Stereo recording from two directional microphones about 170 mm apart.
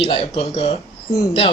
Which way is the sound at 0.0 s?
35° left (ahead or behind).